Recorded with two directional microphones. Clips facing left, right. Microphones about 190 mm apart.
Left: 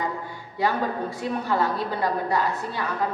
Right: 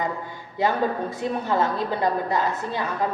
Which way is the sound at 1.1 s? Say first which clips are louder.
Right 1 dB; 20° right (ahead or behind).